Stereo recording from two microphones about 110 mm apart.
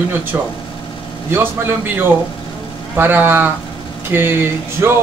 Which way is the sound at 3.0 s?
15° right (ahead or behind).